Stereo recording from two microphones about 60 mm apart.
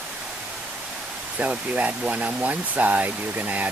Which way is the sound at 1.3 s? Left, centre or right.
Right.